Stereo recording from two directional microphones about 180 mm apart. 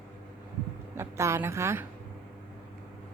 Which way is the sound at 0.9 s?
15° right (ahead or behind).